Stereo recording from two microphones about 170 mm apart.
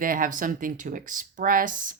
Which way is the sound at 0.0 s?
55° right (ahead or behind).